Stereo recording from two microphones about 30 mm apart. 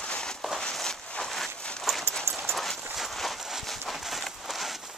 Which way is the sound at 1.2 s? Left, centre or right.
Centre.